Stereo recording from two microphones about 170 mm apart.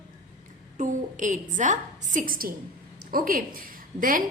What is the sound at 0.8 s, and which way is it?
A woman's voice, 50° right (ahead or behind).